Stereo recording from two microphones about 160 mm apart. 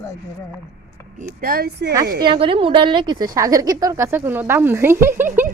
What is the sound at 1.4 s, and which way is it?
Speech, 65° right (ahead or behind).